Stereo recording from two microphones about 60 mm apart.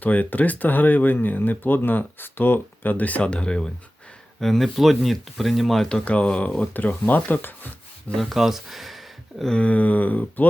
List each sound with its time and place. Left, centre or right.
0.0 s speech: left; by 6.0 s centre
6.1 s speech: centre
6.7 s speech: left
8.2 s speech: centre
9.6 s speech: left